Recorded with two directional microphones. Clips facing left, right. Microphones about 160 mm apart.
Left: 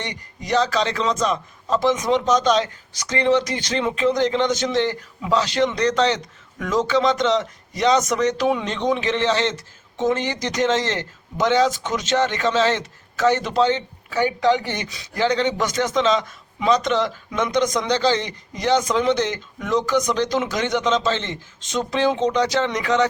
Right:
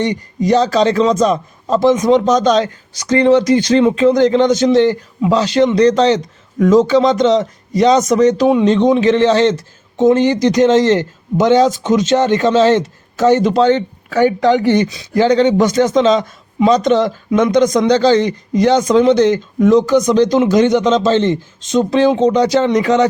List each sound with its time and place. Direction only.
0.5 s a man's voice: 35° right (ahead or behind)
13.6 s speech: 50° right (ahead or behind)
15.1 s a man's voice: 40° right (ahead or behind)